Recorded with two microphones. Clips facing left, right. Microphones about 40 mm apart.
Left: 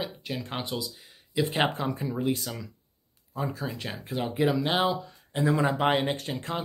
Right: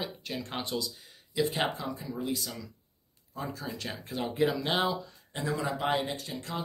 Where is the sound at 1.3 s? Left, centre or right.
Left.